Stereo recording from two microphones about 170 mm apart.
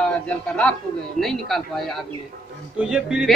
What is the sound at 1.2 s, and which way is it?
A man's voice, centre (ahead or behind).